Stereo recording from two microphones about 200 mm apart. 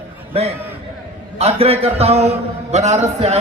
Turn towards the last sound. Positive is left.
turn(degrees=-35)  # may be behind; listen again after turning